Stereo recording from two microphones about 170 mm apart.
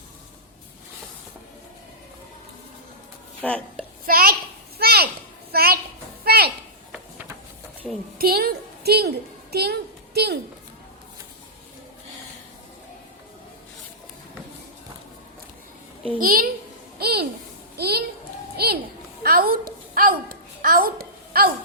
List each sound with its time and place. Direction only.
3.4 s speech: 5° left (ahead or behind)
4.0 s a woman's voice: 60° right (ahead or behind)
4.8 s a sound: 65° right (ahead or behind)
8.2 s a woman's voice: 60° right (ahead or behind)
16.1 s a woman's voice: 55° right (ahead or behind)
17.0 s a sound: 70° right (ahead or behind)